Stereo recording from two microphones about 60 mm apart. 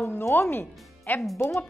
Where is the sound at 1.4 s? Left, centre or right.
Left.